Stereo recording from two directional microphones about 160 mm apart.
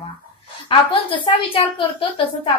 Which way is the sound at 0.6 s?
30° left (ahead or behind).